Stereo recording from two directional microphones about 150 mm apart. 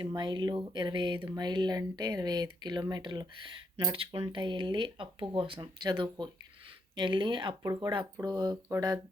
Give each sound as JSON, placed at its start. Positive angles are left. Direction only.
{"t": 0.0, "sound": "speech", "side_deg": -30}